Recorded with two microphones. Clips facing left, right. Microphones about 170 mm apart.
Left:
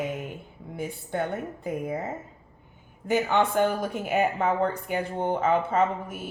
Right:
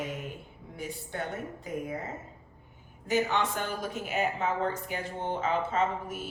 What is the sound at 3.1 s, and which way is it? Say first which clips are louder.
Speech: left 5 dB; 55° left (ahead or behind).